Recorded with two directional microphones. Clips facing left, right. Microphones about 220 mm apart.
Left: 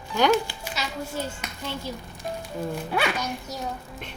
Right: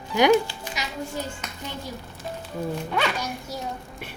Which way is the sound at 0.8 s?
15° right (ahead or behind).